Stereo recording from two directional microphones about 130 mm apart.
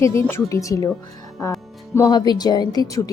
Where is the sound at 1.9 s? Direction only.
30° left (ahead or behind).